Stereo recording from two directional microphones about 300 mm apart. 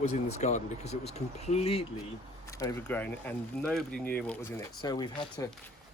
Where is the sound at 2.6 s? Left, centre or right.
Centre.